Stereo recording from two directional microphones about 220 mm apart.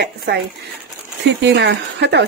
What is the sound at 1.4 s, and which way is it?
Speech, 50° right (ahead or behind).